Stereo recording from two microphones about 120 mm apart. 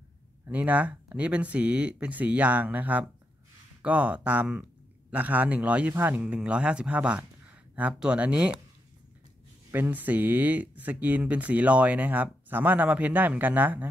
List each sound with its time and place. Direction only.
0.5 s speech: 10° right (ahead or behind)
9.7 s speech: 15° right (ahead or behind)